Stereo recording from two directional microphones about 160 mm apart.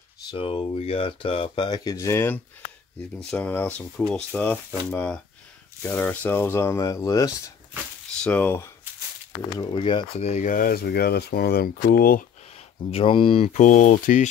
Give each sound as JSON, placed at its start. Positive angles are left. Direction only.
{"t": 0.3, "sound": "speech", "side_deg": 35}
{"t": 8.2, "sound": "speech", "side_deg": 10}
{"t": 9.6, "sound": "speech", "side_deg": 30}
{"t": 10.2, "sound": "speech", "side_deg": 50}
{"t": 12.9, "sound": "speech", "side_deg": 35}
{"t": 13.5, "sound": "speech", "side_deg": 50}